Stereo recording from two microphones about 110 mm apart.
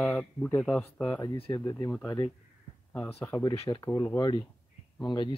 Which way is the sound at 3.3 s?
40° left (ahead or behind).